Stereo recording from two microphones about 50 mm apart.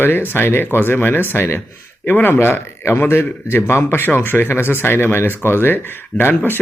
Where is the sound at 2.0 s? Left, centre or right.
Left.